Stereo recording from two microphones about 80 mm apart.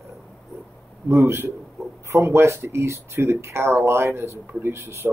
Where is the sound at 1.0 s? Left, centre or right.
Right.